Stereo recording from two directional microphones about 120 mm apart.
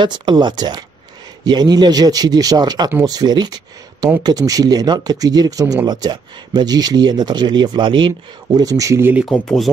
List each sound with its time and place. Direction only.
0.0 s speech: 40° right (ahead or behind)
8.5 s speech: 30° right (ahead or behind)
9.3 s speech: 5° left (ahead or behind)